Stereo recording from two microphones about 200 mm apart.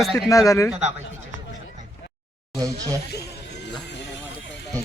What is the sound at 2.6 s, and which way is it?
Speech, 20° right (ahead or behind).